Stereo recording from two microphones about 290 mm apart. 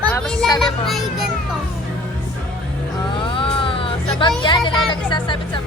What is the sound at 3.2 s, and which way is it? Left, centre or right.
Speech, centre.